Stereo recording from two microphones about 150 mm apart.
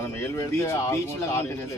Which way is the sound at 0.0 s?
15° left (ahead or behind).